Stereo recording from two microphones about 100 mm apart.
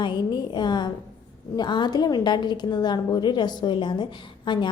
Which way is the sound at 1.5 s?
50° left (ahead or behind).